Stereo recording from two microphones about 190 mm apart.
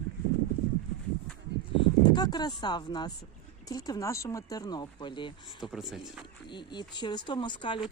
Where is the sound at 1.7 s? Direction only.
25° left (ahead or behind).